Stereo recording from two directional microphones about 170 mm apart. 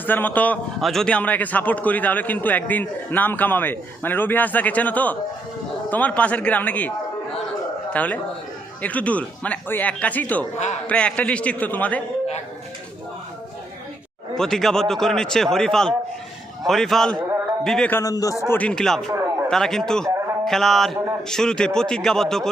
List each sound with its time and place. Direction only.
0.0 s a man's voice: 10° left (ahead or behind)
7.9 s a man's voice: 10° left (ahead or behind)
14.3 s a man's voice: centre (ahead or behind)
18.0 s a man's voice: 20° left (ahead or behind)
18.5 s a man's voice: 5° left (ahead or behind)
19.1 s a sound: 15° right (ahead or behind)
19.5 s a man's voice: 5° left (ahead or behind)